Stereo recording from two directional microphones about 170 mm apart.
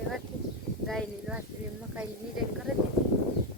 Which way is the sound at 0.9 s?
5° right (ahead or behind).